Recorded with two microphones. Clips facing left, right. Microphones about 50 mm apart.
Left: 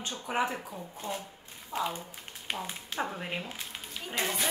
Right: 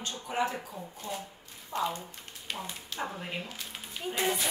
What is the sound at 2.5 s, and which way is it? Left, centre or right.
Speech, centre.